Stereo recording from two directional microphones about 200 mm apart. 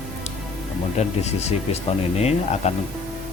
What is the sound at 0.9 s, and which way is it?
Speech, 35° left (ahead or behind).